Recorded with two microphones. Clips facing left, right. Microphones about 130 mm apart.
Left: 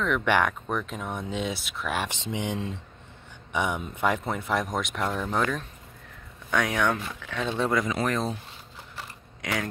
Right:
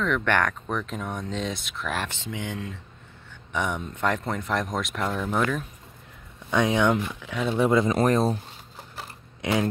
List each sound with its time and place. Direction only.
0.0 s speech: 5° left (ahead or behind)
2.0 s speech: 20° left (ahead or behind)
3.5 s speech: 5° left (ahead or behind)
6.5 s speech: 20° right (ahead or behind)
7.2 s speech: 10° right (ahead or behind)
7.9 s a sound: 40° right (ahead or behind)